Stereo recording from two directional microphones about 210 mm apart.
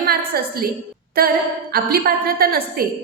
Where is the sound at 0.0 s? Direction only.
45° right (ahead or behind).